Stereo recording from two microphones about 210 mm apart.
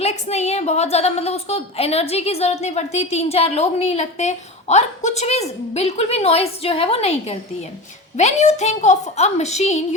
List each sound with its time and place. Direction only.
0.0 s a woman's voice: 30° left (ahead or behind)